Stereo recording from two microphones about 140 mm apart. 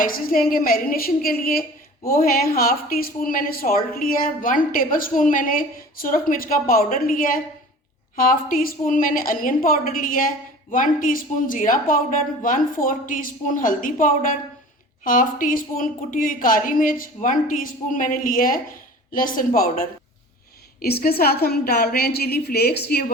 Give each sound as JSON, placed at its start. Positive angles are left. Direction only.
{"t": 0.0, "sound": "a woman's voice", "side_deg": 90}